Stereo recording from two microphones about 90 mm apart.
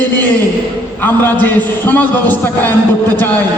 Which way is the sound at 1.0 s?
20° left (ahead or behind).